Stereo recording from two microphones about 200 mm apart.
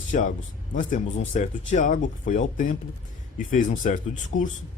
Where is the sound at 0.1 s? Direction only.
40° left (ahead or behind).